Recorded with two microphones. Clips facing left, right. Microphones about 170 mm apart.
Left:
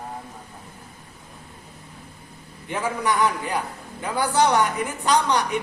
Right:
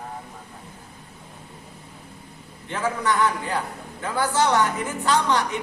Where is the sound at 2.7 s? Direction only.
15° left (ahead or behind).